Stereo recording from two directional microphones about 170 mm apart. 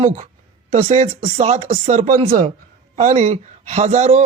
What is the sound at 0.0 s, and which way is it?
A man's voice, 50° right (ahead or behind).